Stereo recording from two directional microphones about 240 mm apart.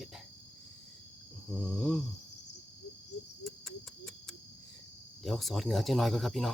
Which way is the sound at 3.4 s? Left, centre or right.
Centre.